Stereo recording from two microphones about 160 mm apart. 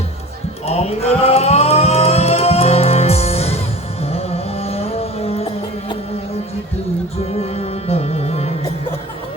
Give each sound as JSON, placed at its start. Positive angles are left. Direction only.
{"t": 0.7, "sound": "music", "side_deg": 40}
{"t": 7.3, "sound": "music", "side_deg": 40}